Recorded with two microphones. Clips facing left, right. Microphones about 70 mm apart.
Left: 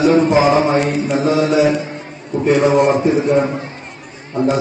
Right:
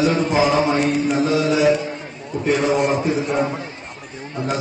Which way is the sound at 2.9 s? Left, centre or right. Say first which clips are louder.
Left 6 dB; left.